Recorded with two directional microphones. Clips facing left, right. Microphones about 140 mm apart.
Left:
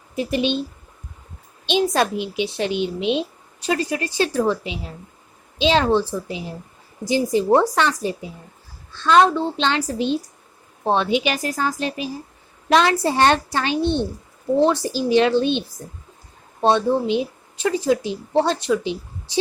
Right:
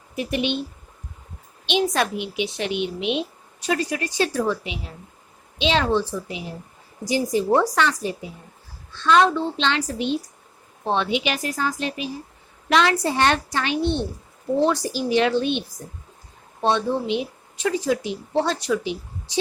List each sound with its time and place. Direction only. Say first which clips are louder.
0.2 s a woman's voice: left 3 dB; 30° left (ahead or behind)
1.6 s a woman's voice: left 3 dB; 35° left (ahead or behind)